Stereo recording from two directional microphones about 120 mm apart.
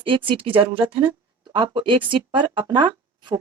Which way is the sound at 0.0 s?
45° right (ahead or behind).